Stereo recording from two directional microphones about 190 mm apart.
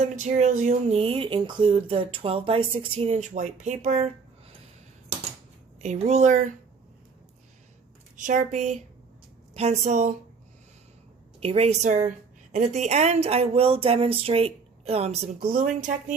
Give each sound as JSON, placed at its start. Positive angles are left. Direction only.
{"t": 0.0, "sound": "a woman's voice", "side_deg": -40}
{"t": 5.8, "sound": "a woman's voice", "side_deg": -35}
{"t": 8.1, "sound": "a woman's voice", "side_deg": -40}
{"t": 11.3, "sound": "a woman's voice", "side_deg": -30}
{"t": 15.4, "sound": "speech", "side_deg": -50}